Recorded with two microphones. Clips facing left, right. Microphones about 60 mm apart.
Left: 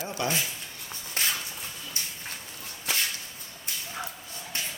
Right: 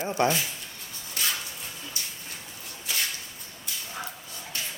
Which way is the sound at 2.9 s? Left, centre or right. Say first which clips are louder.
Left 1 dB; left.